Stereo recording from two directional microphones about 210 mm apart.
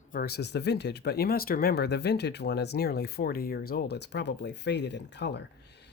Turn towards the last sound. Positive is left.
turn(degrees=55)  # may be behind; listen again after turning